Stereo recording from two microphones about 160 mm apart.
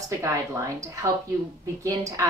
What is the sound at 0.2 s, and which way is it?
A woman's voice, 20° right (ahead or behind).